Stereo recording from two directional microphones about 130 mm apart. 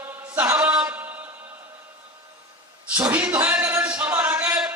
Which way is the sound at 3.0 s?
15° right (ahead or behind).